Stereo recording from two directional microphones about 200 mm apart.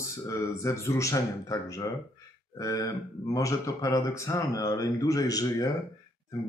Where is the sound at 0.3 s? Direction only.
15° left (ahead or behind).